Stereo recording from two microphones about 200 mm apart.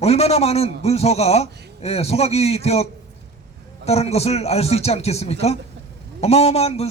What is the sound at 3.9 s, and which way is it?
A man's voice, 30° left (ahead or behind).